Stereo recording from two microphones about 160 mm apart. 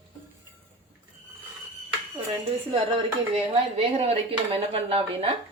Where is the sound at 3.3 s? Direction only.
35° right (ahead or behind).